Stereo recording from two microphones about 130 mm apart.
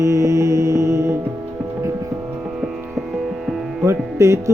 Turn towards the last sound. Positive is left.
turn(degrees=-20)  # may be behind; listen again after turning